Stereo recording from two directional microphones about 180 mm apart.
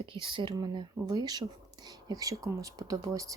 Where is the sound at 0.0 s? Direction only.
30° right (ahead or behind).